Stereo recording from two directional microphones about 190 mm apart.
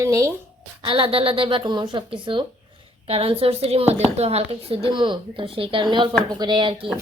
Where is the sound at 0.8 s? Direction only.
30° right (ahead or behind).